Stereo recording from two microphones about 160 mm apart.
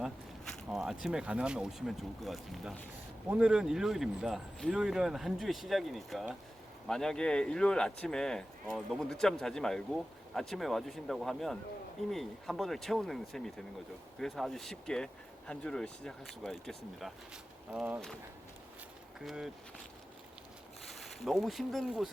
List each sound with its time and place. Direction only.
0.0 s a sound: 5° right (ahead or behind)
1.0 s speech: 5° right (ahead or behind)
17.7 s speech: 10° right (ahead or behind)
19.2 s speech: centre (ahead or behind)
21.0 s speech: centre (ahead or behind)